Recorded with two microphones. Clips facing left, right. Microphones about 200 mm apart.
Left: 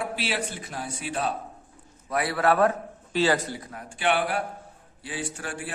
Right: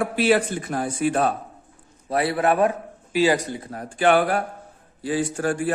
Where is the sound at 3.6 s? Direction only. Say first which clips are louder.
Right 9 dB; 40° right (ahead or behind).